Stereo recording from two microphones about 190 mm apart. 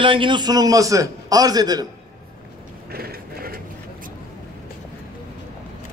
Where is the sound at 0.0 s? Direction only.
25° right (ahead or behind).